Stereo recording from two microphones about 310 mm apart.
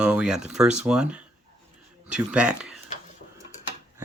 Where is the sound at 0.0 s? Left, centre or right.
Centre.